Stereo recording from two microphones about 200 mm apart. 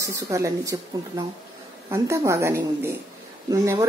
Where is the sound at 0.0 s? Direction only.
15° right (ahead or behind).